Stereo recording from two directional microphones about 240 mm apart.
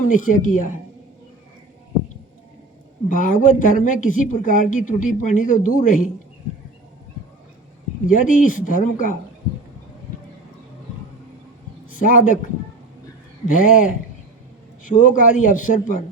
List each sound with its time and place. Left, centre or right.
0.1 s speech: left
3.1 s speech: left
8.1 s speech: left
11.9 s speech: left
13.5 s speech: left